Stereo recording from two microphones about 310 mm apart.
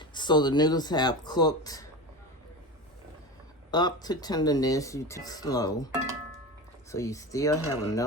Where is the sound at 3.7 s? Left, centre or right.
Centre.